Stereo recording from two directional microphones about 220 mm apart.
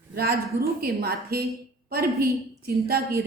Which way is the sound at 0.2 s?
45° right (ahead or behind).